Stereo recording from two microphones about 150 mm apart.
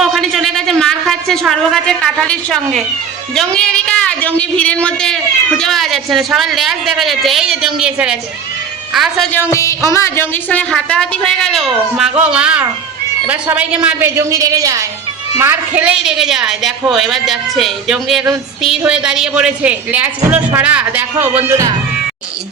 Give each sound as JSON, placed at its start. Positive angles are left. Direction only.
{"t": 0.0, "sound": "a sound", "side_deg": 0}
{"t": 3.3, "sound": "a woman's voice", "side_deg": 5}
{"t": 9.4, "sound": "a woman's voice", "side_deg": 20}
{"t": 14.2, "sound": "a man's voice", "side_deg": -20}